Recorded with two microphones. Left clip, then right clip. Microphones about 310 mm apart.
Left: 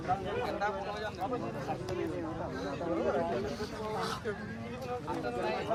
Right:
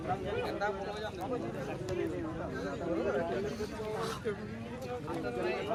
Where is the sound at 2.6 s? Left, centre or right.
Left.